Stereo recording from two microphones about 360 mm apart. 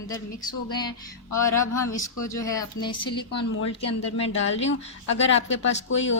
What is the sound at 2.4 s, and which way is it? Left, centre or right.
Speech, centre.